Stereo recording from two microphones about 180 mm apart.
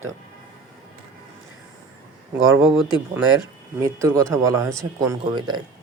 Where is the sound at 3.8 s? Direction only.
15° right (ahead or behind).